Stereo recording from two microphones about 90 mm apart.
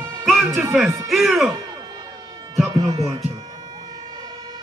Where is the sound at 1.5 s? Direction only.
50° right (ahead or behind).